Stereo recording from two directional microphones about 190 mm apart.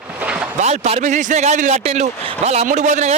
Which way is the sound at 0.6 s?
35° right (ahead or behind).